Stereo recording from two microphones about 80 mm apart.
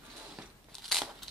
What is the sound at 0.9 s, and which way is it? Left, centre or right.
Crumpling, centre.